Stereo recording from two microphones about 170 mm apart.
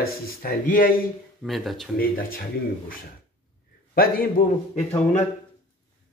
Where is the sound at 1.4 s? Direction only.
Centre (ahead or behind).